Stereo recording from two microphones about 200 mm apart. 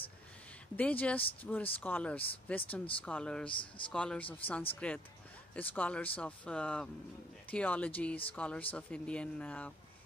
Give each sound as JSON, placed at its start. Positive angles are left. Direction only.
{"t": 0.7, "sound": "speech", "side_deg": 5}
{"t": 3.4, "sound": "speech", "side_deg": 25}
{"t": 3.9, "sound": "speech", "side_deg": 5}